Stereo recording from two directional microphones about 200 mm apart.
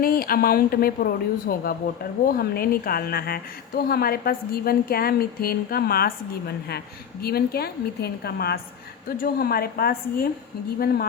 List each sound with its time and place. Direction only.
0.0 s a woman's voice: 50° left (ahead or behind)